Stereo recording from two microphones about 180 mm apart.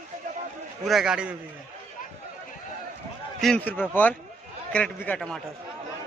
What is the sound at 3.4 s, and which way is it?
A man's voice, 10° left (ahead or behind).